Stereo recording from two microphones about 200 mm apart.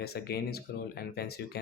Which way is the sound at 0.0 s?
50° left (ahead or behind).